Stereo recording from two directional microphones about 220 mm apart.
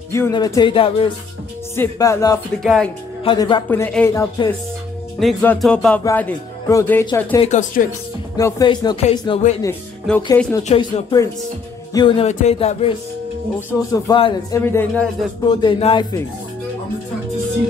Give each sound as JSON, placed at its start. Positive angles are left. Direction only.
{"t": 0.1, "sound": "speech", "side_deg": 15}
{"t": 1.8, "sound": "speech", "side_deg": 15}
{"t": 2.6, "sound": "speech", "side_deg": 0}
{"t": 3.3, "sound": "speech", "side_deg": 20}
{"t": 7.4, "sound": "speech", "side_deg": 35}
{"t": 8.4, "sound": "speech", "side_deg": 15}
{"t": 9.6, "sound": "speech", "side_deg": 10}
{"t": 10.7, "sound": "speech", "side_deg": 25}
{"t": 13.6, "sound": "speech", "side_deg": 15}
{"t": 15.4, "sound": "speech", "side_deg": 20}